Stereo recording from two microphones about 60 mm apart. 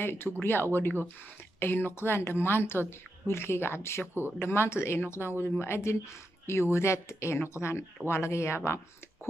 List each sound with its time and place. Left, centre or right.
0.0 s speech: left